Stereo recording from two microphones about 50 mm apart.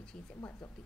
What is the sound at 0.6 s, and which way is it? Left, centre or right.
Speech, centre.